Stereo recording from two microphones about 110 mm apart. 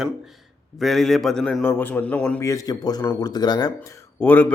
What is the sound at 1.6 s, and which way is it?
Speech, 20° left (ahead or behind).